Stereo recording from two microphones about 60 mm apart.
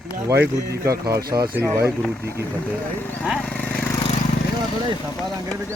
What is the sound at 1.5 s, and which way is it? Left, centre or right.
Speech, right.